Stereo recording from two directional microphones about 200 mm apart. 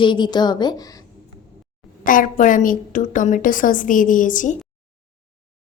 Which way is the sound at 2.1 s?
40° left (ahead or behind).